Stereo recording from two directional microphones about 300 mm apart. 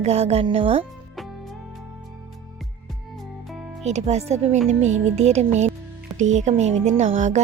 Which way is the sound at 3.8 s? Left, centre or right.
Right.